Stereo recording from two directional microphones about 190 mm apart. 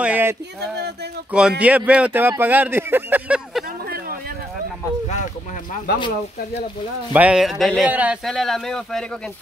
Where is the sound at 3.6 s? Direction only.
50° right (ahead or behind).